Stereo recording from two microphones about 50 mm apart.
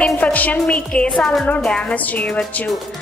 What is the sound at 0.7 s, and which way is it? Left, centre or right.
Speech, left.